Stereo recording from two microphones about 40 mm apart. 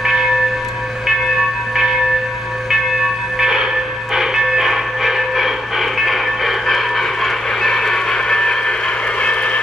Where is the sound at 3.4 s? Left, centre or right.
Centre.